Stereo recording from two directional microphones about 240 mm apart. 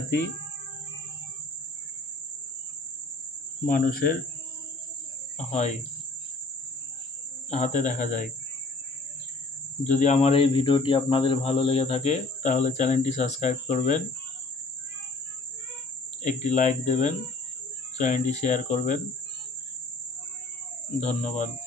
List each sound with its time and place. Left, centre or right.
3.6 s speech: left
5.5 s speech: left
7.4 s speech: left
9.8 s speech: left
16.2 s speech: left
21.0 s speech: left